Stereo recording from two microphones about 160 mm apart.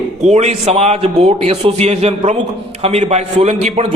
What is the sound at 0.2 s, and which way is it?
A man's voice, 45° right (ahead or behind).